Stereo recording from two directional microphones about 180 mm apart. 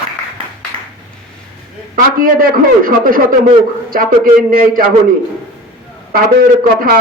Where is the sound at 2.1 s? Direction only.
50° right (ahead or behind).